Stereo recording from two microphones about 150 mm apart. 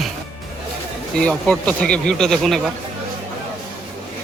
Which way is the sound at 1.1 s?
5° left (ahead or behind).